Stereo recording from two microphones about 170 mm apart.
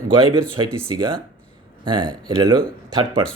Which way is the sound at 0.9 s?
30° right (ahead or behind).